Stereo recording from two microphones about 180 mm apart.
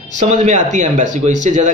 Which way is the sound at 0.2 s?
40° right (ahead or behind).